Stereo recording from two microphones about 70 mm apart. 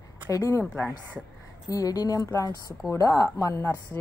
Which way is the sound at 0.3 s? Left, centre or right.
Left.